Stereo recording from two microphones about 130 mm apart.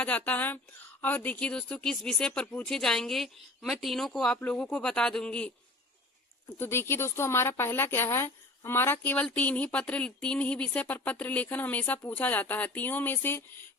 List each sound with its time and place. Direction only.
0.0 s speech: 10° left (ahead or behind)
6.6 s a woman's voice: 20° left (ahead or behind)